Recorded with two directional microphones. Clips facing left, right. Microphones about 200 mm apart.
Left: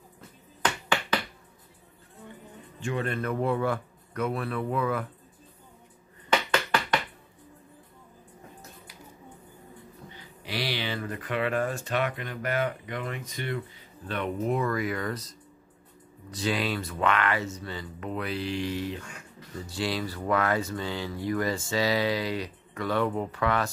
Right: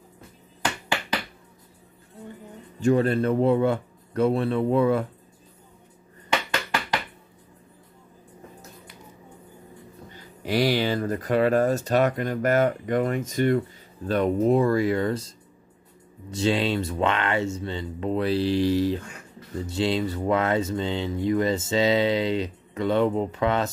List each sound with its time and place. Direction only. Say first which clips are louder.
2.8 s speech: right 10 dB; 35° right (ahead or behind)
10.1 s speech: right 10 dB; 45° right (ahead or behind)
19.6 s speech: right 6 dB; 25° right (ahead or behind)